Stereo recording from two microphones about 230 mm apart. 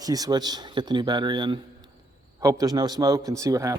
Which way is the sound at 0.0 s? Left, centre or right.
Centre.